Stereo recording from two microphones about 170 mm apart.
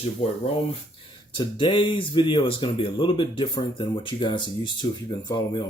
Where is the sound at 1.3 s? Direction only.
30° left (ahead or behind).